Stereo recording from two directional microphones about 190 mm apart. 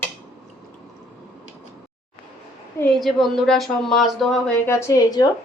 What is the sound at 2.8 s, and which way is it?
A woman's voice, centre (ahead or behind).